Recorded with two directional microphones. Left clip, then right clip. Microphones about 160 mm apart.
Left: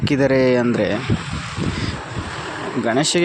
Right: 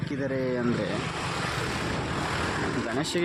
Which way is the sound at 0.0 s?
55° left (ahead or behind).